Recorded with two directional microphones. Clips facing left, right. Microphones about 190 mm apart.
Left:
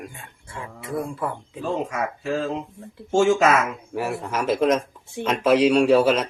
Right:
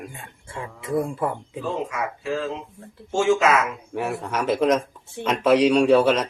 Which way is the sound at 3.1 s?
45° left (ahead or behind).